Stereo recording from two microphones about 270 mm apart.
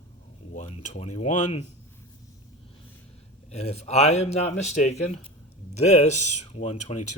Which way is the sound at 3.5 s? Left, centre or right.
Left.